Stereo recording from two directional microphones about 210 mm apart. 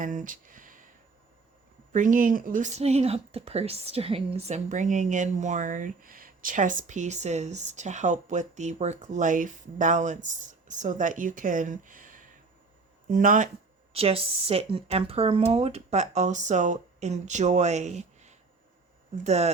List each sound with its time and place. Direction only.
0.0 s speech: 40° right (ahead or behind)
1.9 s speech: 40° right (ahead or behind)
13.9 s speech: 30° right (ahead or behind)